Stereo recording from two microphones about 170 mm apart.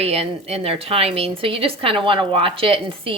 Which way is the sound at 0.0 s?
35° right (ahead or behind).